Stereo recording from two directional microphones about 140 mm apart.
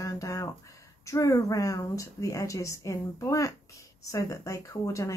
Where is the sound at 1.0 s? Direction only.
25° left (ahead or behind).